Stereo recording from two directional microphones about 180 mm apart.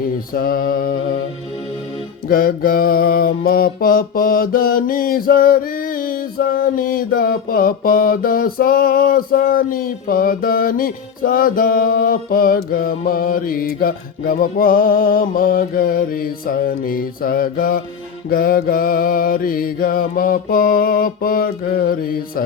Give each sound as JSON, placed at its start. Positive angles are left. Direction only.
{"t": 0.0, "sound": "mantra", "side_deg": 55}
{"t": 2.3, "sound": "mantra", "side_deg": 50}